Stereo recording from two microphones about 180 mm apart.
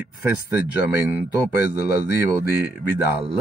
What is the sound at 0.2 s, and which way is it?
Speech, 10° right (ahead or behind).